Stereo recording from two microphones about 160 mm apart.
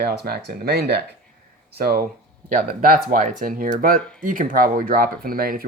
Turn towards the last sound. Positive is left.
turn(degrees=-65)  # may be behind; listen again after turning